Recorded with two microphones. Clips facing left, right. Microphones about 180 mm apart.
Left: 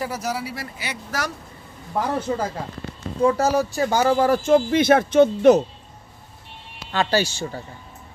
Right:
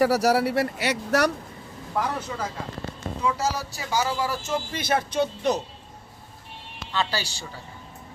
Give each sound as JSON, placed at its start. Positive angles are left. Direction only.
{"t": 0.0, "sound": "speech", "side_deg": -70}
{"t": 2.3, "sound": "speech", "side_deg": 45}
{"t": 3.2, "sound": "speech", "side_deg": 55}
{"t": 6.9, "sound": "speech", "side_deg": 45}